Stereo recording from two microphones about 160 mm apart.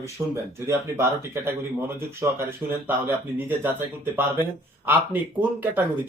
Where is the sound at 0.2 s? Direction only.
20° right (ahead or behind).